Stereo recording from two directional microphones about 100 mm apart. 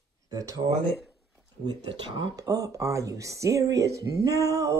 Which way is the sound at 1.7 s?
55° right (ahead or behind).